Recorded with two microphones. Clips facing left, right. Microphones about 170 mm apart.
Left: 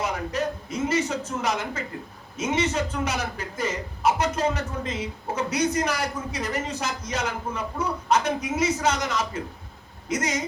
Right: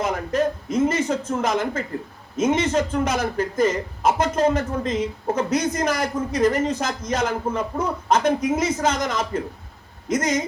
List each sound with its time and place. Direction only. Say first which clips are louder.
0.0 s a man's voice: right 5 dB; 50° right (ahead or behind)